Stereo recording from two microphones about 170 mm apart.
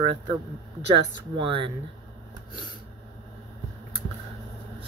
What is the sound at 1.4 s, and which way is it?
Speech, 30° right (ahead or behind).